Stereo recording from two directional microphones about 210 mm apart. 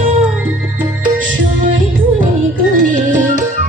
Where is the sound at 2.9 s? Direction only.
35° right (ahead or behind).